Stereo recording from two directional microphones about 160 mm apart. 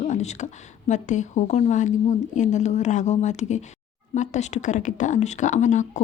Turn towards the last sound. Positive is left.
turn(degrees=50)  # may be behind; listen again after turning